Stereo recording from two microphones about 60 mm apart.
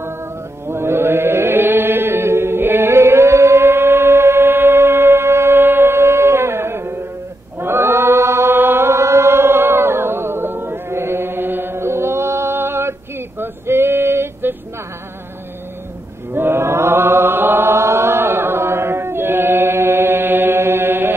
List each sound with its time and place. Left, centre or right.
0.7 s chant: right
13.4 s male singing: right
16.3 s chant: right